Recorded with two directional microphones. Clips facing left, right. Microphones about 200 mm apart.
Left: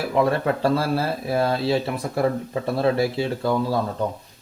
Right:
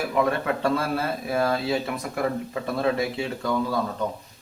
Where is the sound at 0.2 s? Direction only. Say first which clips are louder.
Left 4 dB; 30° left (ahead or behind).